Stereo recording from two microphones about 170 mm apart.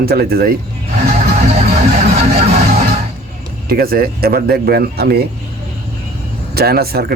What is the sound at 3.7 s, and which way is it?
A man's voice, 60° right (ahead or behind).